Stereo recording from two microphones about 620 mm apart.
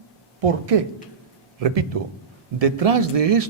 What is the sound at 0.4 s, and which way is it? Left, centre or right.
Speech, right.